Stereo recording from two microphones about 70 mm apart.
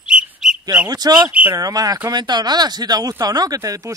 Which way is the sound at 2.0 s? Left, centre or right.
Right.